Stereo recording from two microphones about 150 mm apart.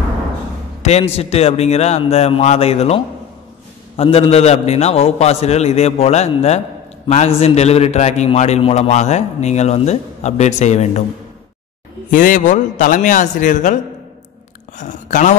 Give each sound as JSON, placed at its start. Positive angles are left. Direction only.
{"t": 0.8, "sound": "a man's voice", "side_deg": 45}
{"t": 12.1, "sound": "a man's voice", "side_deg": 65}
{"t": 14.8, "sound": "a man's voice", "side_deg": 55}